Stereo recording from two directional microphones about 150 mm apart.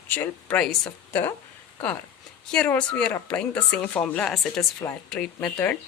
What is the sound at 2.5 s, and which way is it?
A woman's voice, 10° left (ahead or behind).